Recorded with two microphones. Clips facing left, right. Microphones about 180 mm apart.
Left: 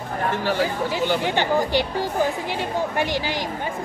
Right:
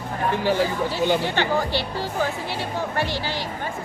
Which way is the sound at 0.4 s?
15° right (ahead or behind).